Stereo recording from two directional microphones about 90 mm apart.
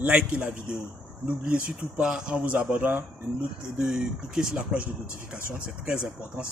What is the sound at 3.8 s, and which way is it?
Speech, 5° right (ahead or behind).